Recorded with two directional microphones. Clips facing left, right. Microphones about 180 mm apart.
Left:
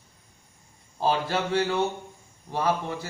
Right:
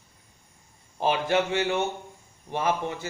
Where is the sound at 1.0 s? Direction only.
20° right (ahead or behind).